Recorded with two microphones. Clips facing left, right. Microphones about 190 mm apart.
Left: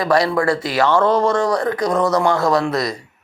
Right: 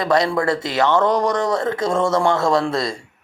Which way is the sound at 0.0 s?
20° right (ahead or behind).